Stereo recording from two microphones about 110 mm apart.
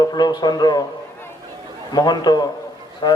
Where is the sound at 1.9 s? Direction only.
40° left (ahead or behind).